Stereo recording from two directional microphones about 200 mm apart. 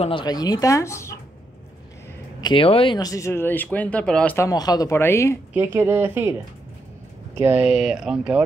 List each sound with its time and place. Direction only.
0.0 s speech: 25° left (ahead or behind)
2.4 s speech: 25° left (ahead or behind)
5.5 s speech: 10° right (ahead or behind)
7.3 s speech: 10° right (ahead or behind)